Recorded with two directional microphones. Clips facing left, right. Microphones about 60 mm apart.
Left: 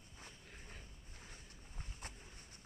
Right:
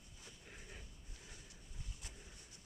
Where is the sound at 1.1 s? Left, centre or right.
Left.